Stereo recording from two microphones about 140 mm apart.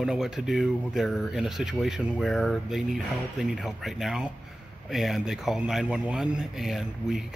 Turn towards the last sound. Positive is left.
turn(degrees=0)  # may be behind; listen again after turning